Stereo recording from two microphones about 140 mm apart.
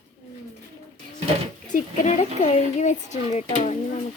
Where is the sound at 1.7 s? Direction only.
55° left (ahead or behind).